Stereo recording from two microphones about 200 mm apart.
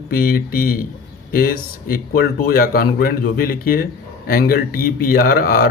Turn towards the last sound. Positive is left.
turn(degrees=50)  # may be behind; listen again after turning